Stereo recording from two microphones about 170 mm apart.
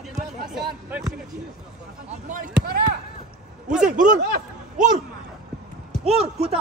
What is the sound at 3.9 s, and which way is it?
Speech, 50° right (ahead or behind).